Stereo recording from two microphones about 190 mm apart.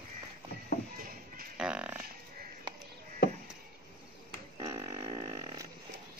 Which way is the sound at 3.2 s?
60° left (ahead or behind).